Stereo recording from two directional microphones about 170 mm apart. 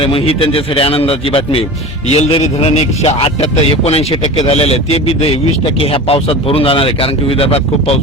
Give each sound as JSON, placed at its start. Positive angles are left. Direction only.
{"t": 0.0, "sound": "speech", "side_deg": 30}